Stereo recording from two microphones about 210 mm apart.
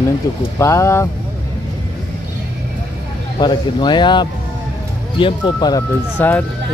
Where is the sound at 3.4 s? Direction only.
20° left (ahead or behind).